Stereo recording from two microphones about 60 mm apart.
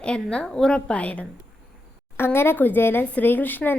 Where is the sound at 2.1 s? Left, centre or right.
Left.